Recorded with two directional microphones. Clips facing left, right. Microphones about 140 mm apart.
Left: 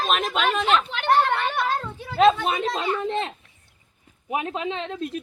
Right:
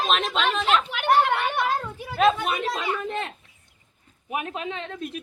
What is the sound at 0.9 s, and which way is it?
Children playing, 10° right (ahead or behind).